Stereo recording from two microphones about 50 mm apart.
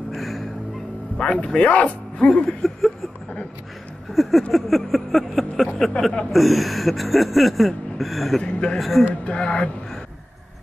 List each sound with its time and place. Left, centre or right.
0.1 s music: centre
1.1 s a man's voice: centre
4.1 s a sound: centre
8.4 s a man's voice: left
8.7 s a sound: centre
9.0 s a man's voice: left